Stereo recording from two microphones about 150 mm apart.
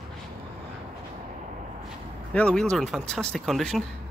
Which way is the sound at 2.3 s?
10° left (ahead or behind).